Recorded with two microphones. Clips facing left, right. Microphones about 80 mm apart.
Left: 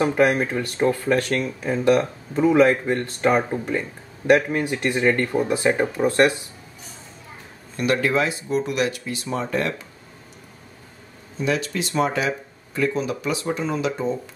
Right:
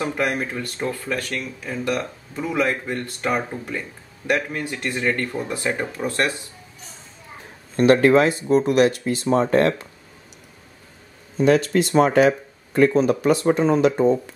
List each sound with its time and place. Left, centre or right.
0.0 s speech: left
7.7 s speech: right
11.3 s speech: right